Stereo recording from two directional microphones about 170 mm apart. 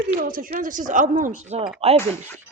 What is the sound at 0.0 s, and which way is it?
Speech, 55° right (ahead or behind).